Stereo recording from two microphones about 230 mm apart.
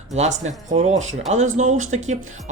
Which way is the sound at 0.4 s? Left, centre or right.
Right.